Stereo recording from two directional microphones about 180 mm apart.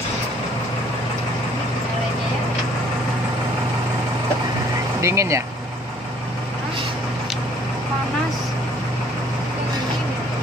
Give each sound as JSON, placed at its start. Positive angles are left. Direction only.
{"t": 5.0, "sound": "speech", "side_deg": -15}